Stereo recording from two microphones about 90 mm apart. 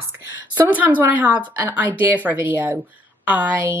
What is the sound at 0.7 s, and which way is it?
Speech, 20° right (ahead or behind).